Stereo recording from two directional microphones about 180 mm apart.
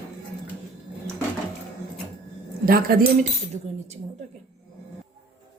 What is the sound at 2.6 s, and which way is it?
Speech, 55° right (ahead or behind).